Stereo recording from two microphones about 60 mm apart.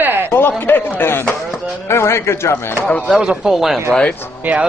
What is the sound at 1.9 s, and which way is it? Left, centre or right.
Speech, left.